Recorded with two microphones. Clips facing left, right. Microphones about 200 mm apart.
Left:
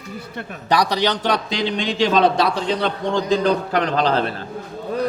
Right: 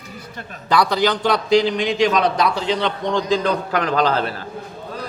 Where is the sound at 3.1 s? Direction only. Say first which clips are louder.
Left 1 dB; 40° left (ahead or behind).